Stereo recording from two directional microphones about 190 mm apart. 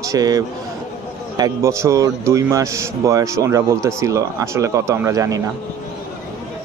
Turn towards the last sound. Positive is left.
turn(degrees=-20)  # may be behind; listen again after turning